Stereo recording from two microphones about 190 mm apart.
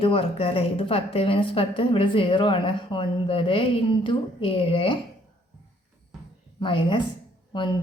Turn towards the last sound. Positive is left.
turn(degrees=25)  # may be behind; listen again after turning